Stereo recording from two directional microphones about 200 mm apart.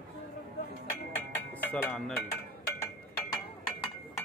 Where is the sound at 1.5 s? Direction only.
10° left (ahead or behind).